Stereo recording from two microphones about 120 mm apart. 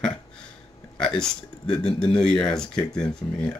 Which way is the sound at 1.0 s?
5° left (ahead or behind).